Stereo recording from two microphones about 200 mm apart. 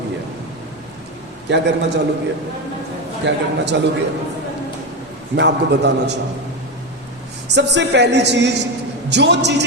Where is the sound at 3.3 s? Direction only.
60° right (ahead or behind).